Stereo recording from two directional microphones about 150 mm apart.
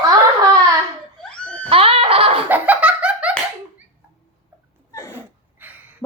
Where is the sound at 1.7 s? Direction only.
40° right (ahead or behind).